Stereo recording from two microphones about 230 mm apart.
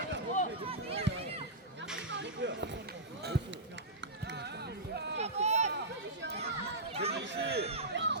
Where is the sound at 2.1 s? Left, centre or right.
Right.